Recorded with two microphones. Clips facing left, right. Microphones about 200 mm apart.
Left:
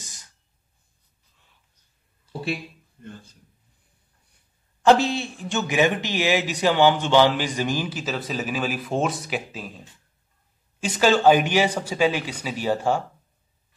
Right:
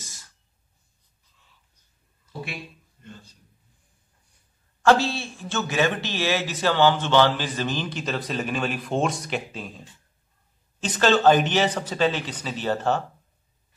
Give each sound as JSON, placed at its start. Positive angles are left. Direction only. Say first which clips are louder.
{"t": 0.0, "sound": "a sound", "louder": "even", "side_deg": 20}
{"t": 3.0, "sound": "a man's voice", "louder": "left 4 dB", "side_deg": 50}
{"t": 4.8, "sound": "a man's voice", "louder": "left 2 dB", "side_deg": 20}
{"t": 10.8, "sound": "a man's voice", "louder": "left 1 dB", "side_deg": 10}